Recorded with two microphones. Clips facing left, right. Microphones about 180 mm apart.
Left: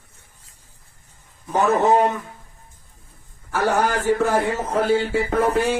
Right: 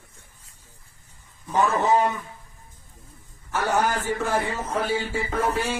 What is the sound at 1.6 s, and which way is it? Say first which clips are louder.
Speech: left 5 dB; 50° left (ahead or behind).